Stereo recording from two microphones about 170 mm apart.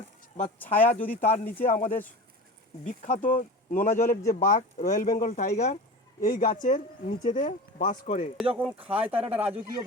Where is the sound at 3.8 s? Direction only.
15° left (ahead or behind).